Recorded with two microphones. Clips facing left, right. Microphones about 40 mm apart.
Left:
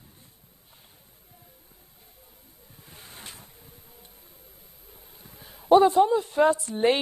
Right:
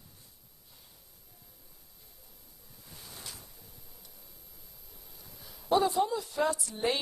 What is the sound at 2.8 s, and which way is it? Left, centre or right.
Wind, left.